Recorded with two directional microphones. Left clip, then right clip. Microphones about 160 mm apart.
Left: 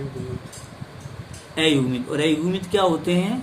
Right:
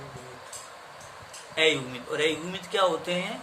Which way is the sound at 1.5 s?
20° left (ahead or behind).